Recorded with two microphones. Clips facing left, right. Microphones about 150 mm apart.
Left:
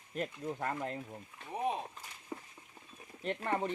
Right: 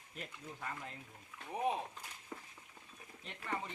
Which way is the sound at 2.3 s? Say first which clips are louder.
Left 6 dB; 15° left (ahead or behind).